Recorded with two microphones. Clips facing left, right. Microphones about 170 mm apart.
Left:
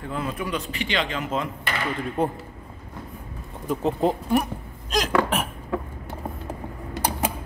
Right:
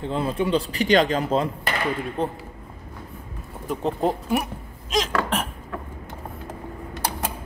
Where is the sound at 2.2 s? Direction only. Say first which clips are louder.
Left 3 dB; 10° left (ahead or behind).